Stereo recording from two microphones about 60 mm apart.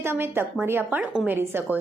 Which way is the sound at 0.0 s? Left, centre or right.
Right.